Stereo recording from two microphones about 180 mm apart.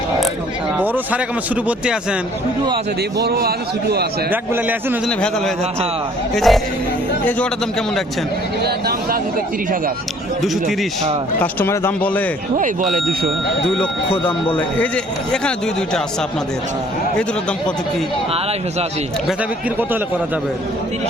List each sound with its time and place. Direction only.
1.6 s speech: 5° right (ahead or behind)
3.2 s a man's voice: 60° right (ahead or behind)
4.3 s a man's voice: 10° right (ahead or behind)
6.3 s speech: centre (ahead or behind)
10.4 s speech: centre (ahead or behind)
11.6 s speech: 15° left (ahead or behind)
12.5 s speech: 45° right (ahead or behind)
15.3 s speech: 5° left (ahead or behind)